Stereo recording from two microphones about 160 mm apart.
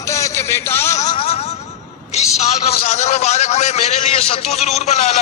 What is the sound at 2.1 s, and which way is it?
A man's voice, 45° left (ahead or behind).